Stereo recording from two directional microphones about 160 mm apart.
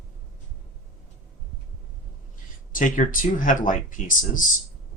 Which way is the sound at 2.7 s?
55° left (ahead or behind).